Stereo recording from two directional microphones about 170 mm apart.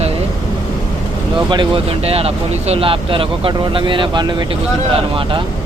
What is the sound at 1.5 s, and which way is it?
Speech, 30° right (ahead or behind).